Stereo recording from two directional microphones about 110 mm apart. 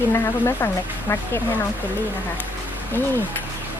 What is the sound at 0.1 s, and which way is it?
Speech, 25° left (ahead or behind).